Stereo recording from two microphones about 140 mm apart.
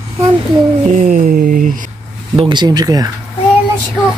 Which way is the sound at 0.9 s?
65° right (ahead or behind).